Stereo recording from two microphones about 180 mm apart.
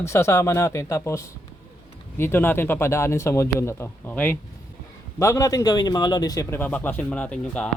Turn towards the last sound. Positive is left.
turn(degrees=5)  # may be behind; listen again after turning